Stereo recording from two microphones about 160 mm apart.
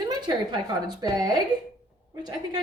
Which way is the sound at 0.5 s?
25° right (ahead or behind).